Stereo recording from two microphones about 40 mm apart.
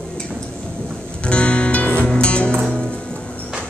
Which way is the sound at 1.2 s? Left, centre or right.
Left.